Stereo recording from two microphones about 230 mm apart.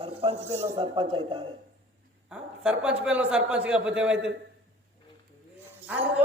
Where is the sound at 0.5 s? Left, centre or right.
Right.